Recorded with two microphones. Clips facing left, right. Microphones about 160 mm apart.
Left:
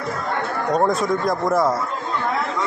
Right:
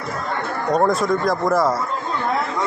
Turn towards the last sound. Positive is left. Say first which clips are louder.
# right 1 dB
turn(degrees=0)  # may be behind; listen again after turning